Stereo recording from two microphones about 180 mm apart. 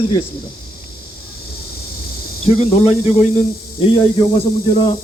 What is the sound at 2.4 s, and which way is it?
Speech, 35° left (ahead or behind).